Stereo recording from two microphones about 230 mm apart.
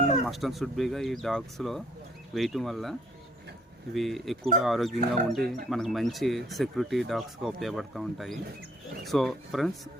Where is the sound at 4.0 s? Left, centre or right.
Centre.